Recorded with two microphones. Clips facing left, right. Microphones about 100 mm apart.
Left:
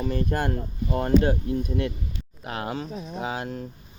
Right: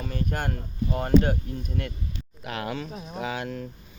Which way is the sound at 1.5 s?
15° left (ahead or behind).